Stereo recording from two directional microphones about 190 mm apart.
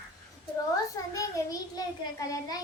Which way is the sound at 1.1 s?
20° left (ahead or behind).